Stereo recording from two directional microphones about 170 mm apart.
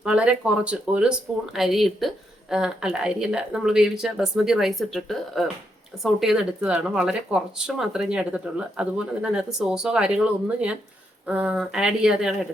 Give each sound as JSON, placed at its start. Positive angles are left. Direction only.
{"t": 0.0, "sound": "speech", "side_deg": -5}